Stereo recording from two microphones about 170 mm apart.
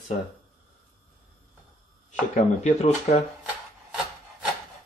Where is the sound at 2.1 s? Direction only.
45° left (ahead or behind).